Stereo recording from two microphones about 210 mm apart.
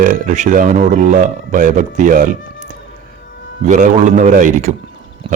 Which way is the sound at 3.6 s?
35° right (ahead or behind).